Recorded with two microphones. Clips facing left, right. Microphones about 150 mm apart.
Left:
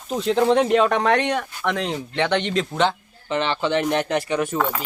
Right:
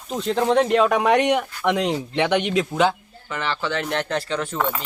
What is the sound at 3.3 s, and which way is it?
Speech, 20° left (ahead or behind).